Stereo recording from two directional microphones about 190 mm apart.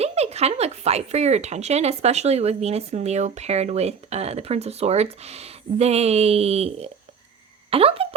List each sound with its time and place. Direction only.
0.0 s speech: 35° right (ahead or behind)